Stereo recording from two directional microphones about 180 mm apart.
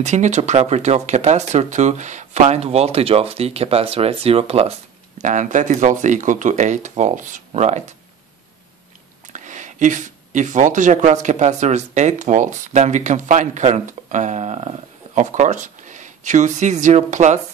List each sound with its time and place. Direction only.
0.0 s speech: 40° right (ahead or behind)
9.3 s speech: 45° right (ahead or behind)